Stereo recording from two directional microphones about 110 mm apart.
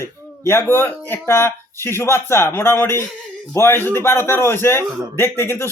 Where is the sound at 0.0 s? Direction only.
25° left (ahead or behind).